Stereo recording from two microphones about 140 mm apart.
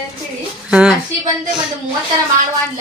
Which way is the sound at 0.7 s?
5° right (ahead or behind).